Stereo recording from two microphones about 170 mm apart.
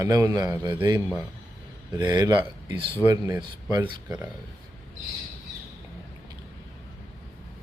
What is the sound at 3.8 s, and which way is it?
Speech, 10° right (ahead or behind).